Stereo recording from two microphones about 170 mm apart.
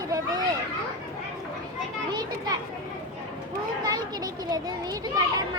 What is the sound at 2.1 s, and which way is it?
Speech, 25° right (ahead or behind).